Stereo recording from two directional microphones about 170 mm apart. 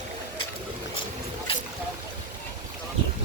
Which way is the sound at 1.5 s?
35° left (ahead or behind).